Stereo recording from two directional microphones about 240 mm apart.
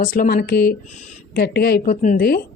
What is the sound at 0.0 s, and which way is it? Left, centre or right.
Speech, left.